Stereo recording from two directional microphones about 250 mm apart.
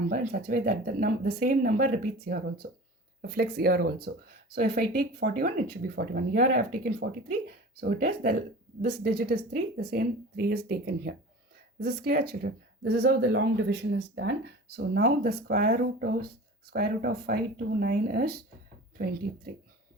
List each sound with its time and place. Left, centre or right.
0.1 s speech: right